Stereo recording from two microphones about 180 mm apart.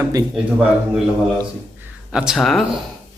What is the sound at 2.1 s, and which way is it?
Speech, 5° right (ahead or behind).